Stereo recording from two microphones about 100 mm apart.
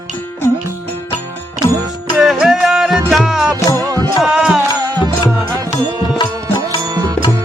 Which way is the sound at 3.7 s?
35° right (ahead or behind).